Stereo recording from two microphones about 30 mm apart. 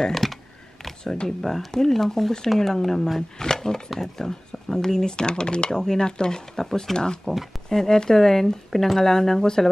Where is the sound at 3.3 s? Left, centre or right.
Centre.